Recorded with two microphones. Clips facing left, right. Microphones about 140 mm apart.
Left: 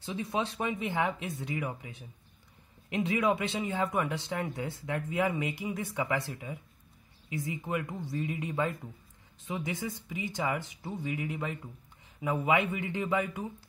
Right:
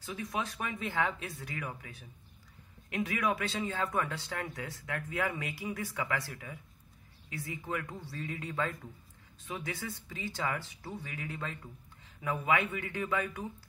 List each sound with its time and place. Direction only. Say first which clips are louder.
0.0 s a man's voice: left 4 dB; 25° left (ahead or behind)